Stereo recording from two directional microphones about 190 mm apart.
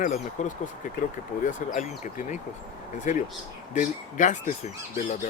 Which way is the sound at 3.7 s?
40° left (ahead or behind).